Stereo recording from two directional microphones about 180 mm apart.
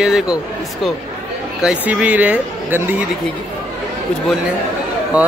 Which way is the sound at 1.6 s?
5° right (ahead or behind).